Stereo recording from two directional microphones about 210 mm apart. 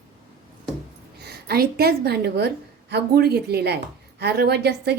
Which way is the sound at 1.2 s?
50° right (ahead or behind).